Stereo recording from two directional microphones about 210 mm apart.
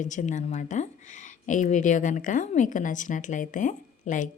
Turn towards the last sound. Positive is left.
turn(degrees=35)  # may be behind; listen again after turning